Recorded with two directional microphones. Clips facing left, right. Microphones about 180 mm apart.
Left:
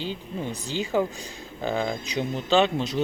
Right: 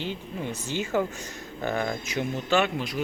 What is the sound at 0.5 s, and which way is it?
Speech, 15° left (ahead or behind).